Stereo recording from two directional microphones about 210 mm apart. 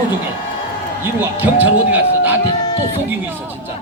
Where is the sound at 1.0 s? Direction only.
10° right (ahead or behind).